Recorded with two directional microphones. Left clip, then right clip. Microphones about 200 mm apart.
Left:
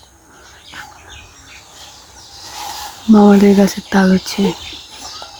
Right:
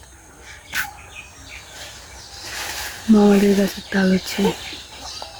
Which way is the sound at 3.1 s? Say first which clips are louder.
Left 6 dB; 20° left (ahead or behind).